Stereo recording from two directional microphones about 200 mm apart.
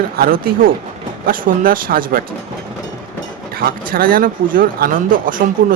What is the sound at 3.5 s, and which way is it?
Speech, 45° right (ahead or behind).